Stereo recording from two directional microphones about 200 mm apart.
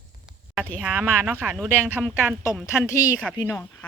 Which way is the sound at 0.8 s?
5° right (ahead or behind).